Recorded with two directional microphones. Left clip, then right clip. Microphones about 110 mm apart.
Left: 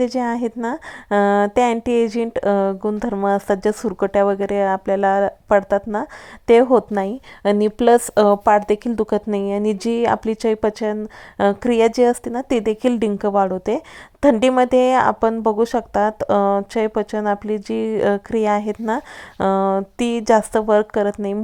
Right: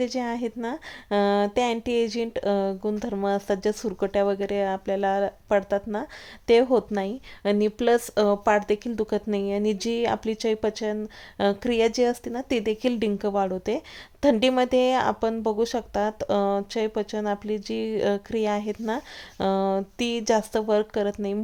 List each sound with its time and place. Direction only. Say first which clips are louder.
0.0 s a woman's voice: left 7 dB; 45° left (ahead or behind)
13.1 s speech: left 7 dB; 40° left (ahead or behind)